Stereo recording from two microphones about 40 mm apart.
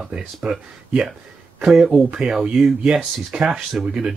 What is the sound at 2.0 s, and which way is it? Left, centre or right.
Speech, right.